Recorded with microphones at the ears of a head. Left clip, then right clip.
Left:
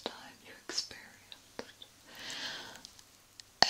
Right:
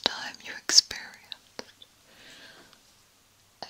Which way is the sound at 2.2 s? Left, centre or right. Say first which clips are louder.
Left 9 dB; left.